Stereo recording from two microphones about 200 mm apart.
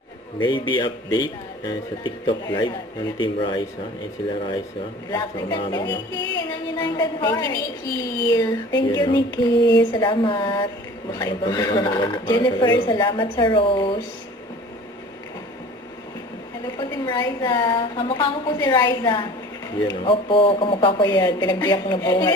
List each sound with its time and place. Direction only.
0.3 s a man's voice: 25° left (ahead or behind)
5.1 s a man's voice: 20° left (ahead or behind)
16.7 s a man's voice: 20° left (ahead or behind)